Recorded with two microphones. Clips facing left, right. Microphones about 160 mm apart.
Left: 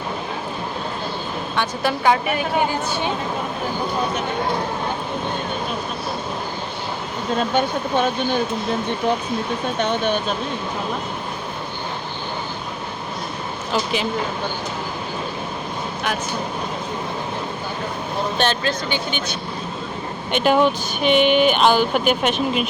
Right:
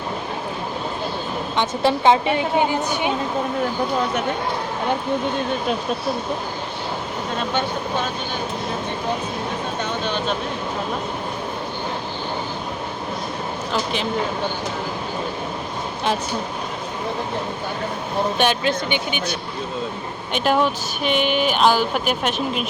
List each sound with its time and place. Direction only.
1.5 s a woman's voice: 25° right (ahead or behind)
18.3 s a woman's voice: 15° right (ahead or behind)
20.3 s speech: centre (ahead or behind)